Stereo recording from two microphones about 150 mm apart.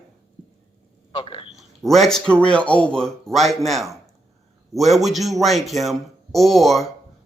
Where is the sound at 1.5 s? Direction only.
Centre (ahead or behind).